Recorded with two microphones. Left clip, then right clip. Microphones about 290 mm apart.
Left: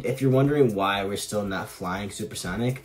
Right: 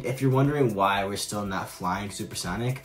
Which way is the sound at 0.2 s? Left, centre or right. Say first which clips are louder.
Left 3 dB; centre.